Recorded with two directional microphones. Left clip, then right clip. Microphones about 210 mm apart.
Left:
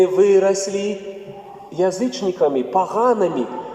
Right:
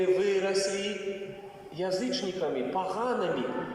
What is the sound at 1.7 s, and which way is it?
A man's voice, 55° left (ahead or behind).